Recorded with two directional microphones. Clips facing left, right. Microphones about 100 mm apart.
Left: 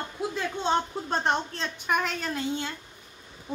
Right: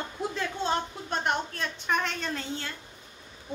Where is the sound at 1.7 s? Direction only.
10° left (ahead or behind).